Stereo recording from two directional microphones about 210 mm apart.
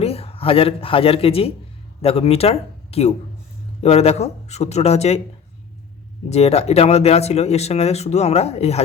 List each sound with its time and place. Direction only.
0.0 s speech: 30° left (ahead or behind)
6.2 s speech: 30° left (ahead or behind)